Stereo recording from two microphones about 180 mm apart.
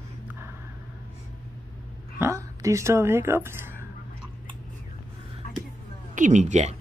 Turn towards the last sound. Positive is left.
turn(degrees=-40)  # may be behind; listen again after turning